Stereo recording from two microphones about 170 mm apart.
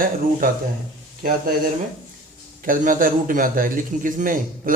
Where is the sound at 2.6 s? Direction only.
50° right (ahead or behind).